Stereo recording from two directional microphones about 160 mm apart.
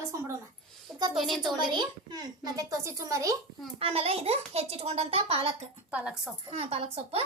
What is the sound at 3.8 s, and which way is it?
A child's voice, 35° right (ahead or behind).